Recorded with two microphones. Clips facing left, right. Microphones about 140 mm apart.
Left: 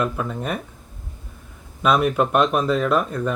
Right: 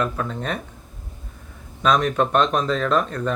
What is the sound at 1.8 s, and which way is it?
Speech, 10° left (ahead or behind).